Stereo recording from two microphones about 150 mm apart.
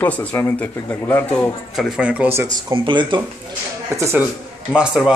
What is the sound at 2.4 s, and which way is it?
Speech, 35° right (ahead or behind).